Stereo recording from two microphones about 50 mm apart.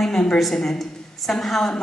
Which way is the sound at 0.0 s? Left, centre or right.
Centre.